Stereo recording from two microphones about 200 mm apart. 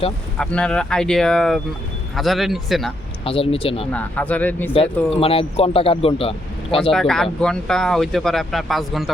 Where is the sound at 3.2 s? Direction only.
25° left (ahead or behind).